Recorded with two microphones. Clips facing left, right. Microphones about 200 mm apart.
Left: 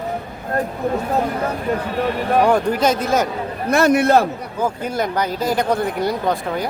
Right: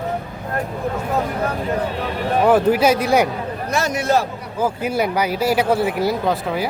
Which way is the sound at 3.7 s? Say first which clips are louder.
Left 6 dB; 55° left (ahead or behind).